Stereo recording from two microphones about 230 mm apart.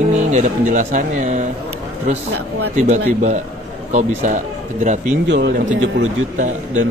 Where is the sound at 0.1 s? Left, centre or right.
Right.